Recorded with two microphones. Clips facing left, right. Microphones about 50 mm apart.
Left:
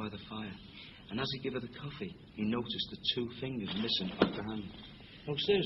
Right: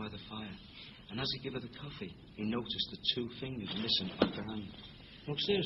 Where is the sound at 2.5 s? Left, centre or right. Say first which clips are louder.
Left 1 dB; centre.